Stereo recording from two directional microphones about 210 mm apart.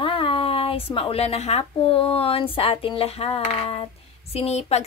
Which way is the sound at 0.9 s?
30° left (ahead or behind).